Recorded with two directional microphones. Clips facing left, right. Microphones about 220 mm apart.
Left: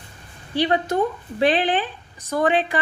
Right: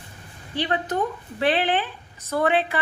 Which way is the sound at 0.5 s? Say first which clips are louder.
Left 5 dB; 10° left (ahead or behind).